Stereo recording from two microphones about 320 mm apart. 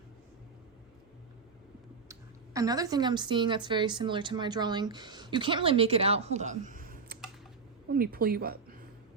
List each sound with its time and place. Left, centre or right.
2.0 s a woman's voice: centre; by 8.5 s right